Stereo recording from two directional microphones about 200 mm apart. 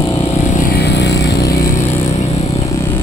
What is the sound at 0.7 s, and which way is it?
Vehicle, 55° left (ahead or behind).